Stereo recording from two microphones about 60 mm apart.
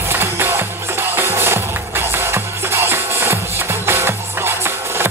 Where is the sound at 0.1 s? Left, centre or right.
Right.